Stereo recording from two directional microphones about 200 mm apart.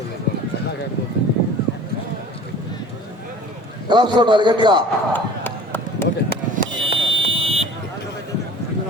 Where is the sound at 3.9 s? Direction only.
20° right (ahead or behind).